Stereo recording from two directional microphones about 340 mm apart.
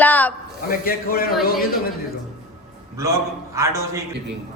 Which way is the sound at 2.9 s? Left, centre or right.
Centre.